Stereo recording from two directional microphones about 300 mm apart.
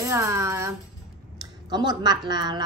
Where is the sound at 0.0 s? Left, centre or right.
Centre.